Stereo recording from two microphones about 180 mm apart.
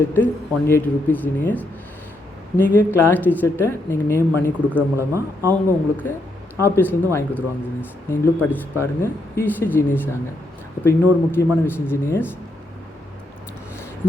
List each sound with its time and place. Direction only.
0.0 s speech: 10° left (ahead or behind)
4.9 s speech: 15° right (ahead or behind)
5.6 s speech: 10° left (ahead or behind)